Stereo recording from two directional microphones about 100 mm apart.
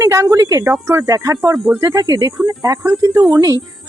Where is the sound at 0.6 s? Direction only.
25° right (ahead or behind).